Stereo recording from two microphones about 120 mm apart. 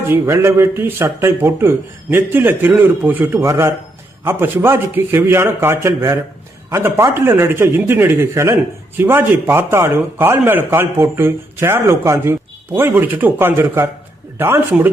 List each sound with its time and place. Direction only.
0.1 s a man's voice: 20° right (ahead or behind)